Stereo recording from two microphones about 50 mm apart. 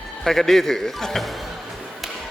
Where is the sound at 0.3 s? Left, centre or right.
Centre.